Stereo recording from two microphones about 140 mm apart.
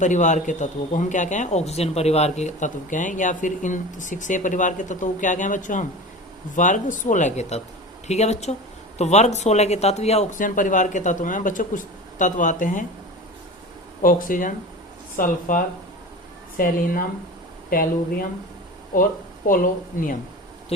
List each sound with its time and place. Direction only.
0.0 s speech: 60° left (ahead or behind)
10.3 s speech: 70° left (ahead or behind)
14.0 s a woman's voice: 85° left
16.6 s a woman's voice: 90° left
19.5 s a woman's voice: 80° left